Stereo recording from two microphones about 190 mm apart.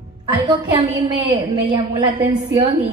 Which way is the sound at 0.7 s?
30° right (ahead or behind).